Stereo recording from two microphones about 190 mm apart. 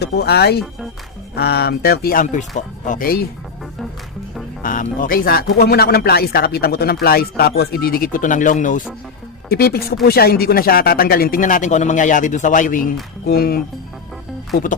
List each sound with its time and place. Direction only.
0.0 s speech: 60° left (ahead or behind)
4.6 s speech: 45° left (ahead or behind)
9.5 s speech: 55° left (ahead or behind)